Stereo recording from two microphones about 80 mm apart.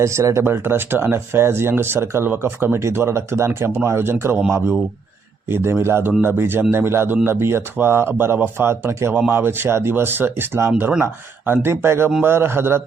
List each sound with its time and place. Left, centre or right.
0.0 s speech: right
5.5 s a man's voice: right